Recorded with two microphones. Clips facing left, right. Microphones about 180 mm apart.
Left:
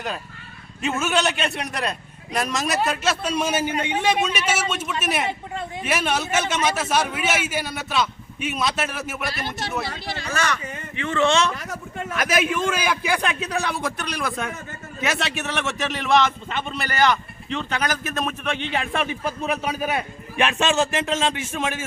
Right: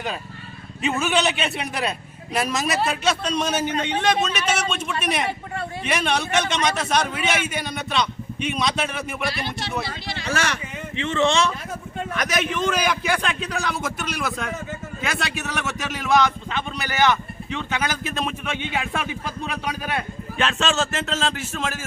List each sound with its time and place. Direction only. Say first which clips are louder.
0.8 s speech: right 1 dB; centre (ahead or behind)
9.3 s speech: even; 45° left (ahead or behind)
10.9 s speech: even; 20° right (ahead or behind)
12.1 s a man's voice: left 3 dB; 5° left (ahead or behind)
13.6 s speech: left 1 dB; centre (ahead or behind)